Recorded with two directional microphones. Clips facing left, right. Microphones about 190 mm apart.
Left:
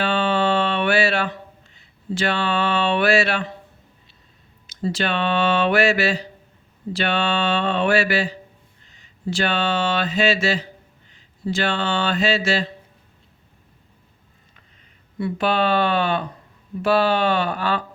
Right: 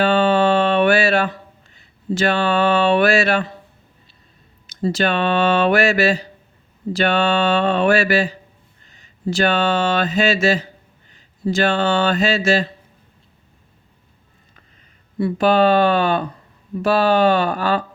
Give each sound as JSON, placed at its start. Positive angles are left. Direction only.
{"t": 0.0, "sound": "music", "side_deg": -45}
{"t": 2.1, "sound": "speech", "side_deg": -45}
{"t": 4.6, "sound": "speech", "side_deg": -45}
{"t": 9.3, "sound": "speech", "side_deg": -45}
{"t": 15.2, "sound": "speech", "side_deg": -40}